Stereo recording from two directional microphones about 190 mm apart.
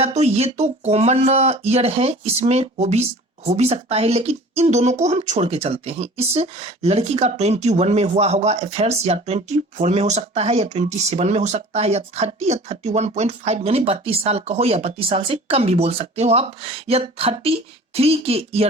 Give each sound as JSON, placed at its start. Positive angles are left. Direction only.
{"t": 0.0, "sound": "speech", "side_deg": -35}